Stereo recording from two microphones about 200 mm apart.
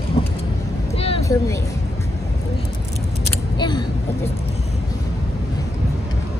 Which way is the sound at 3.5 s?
20° left (ahead or behind).